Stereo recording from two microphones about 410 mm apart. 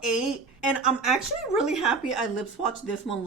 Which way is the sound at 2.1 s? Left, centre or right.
Left.